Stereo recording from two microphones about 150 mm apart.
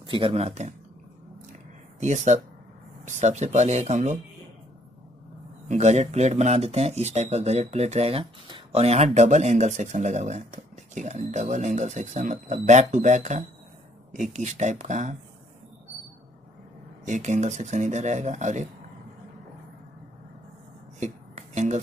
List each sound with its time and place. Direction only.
0.0 s speech: 35° right (ahead or behind)
2.0 s speech: 50° right (ahead or behind)
5.7 s speech: 50° right (ahead or behind)
17.0 s speech: 55° right (ahead or behind)
21.0 s music: 50° right (ahead or behind)